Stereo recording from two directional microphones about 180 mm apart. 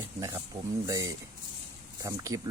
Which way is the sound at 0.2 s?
15° right (ahead or behind).